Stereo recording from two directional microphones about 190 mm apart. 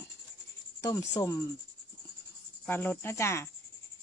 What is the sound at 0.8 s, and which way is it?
Speech, 15° left (ahead or behind).